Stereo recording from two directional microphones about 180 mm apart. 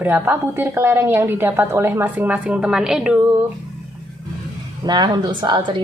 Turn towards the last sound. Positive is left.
turn(degrees=-25)  # may be behind; listen again after turning